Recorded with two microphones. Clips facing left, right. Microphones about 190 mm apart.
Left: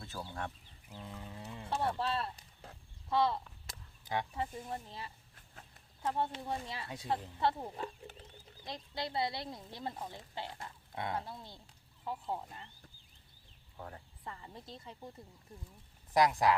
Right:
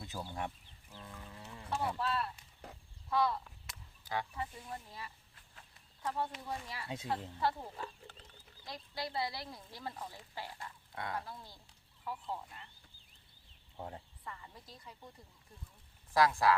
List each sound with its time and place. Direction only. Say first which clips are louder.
0.0 s speech: right 1 dB; 15° right (ahead or behind)
0.9 s speech: left 4 dB; 20° left (ahead or behind)
1.5 s a sound: left 1 dB; 25° left (ahead or behind)
2.0 s speech: left 1 dB; 30° left (ahead or behind)
3.1 s a sound: left 2 dB; 25° left (ahead or behind)
4.7 s speech: left 3 dB; 25° left (ahead or behind)
6.8 s a woman's voice: right 2 dB; 20° right (ahead or behind)
7.3 s speech: left 2 dB; 25° left (ahead or behind)
13.7 s speech: right 2 dB; 20° right (ahead or behind)
14.3 s speech: left 4 dB; 30° left (ahead or behind)
16.1 s speech: left 1 dB; 20° left (ahead or behind)